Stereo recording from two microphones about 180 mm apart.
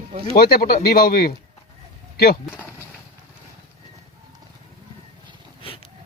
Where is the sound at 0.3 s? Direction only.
55° left (ahead or behind).